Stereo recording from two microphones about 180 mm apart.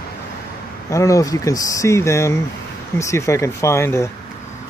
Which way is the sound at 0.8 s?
15° left (ahead or behind).